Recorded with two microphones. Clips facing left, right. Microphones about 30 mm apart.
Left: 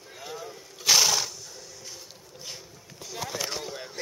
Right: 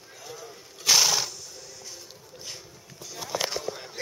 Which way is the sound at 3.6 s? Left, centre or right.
Centre.